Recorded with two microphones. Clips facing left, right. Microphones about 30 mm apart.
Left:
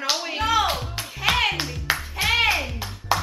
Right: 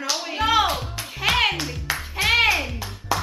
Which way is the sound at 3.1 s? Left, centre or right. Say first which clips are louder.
Left 1 dB; left.